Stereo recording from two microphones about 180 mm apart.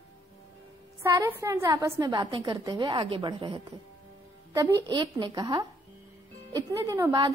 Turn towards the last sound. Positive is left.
turn(degrees=-15)  # may be behind; listen again after turning